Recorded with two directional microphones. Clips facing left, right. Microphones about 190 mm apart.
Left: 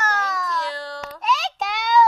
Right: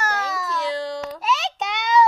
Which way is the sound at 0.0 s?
10° right (ahead or behind).